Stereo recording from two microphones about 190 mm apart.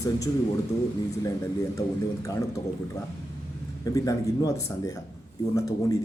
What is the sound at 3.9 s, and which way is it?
Speech, 20° left (ahead or behind).